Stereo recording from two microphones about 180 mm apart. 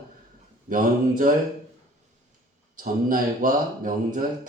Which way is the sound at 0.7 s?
50° right (ahead or behind).